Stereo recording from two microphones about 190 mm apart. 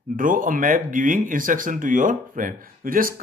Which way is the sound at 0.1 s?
45° right (ahead or behind).